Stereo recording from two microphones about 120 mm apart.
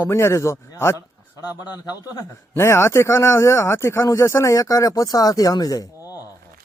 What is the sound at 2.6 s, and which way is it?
Speech, 20° left (ahead or behind).